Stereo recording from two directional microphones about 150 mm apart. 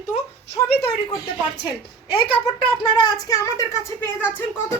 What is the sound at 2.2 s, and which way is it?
A woman's voice, 35° left (ahead or behind).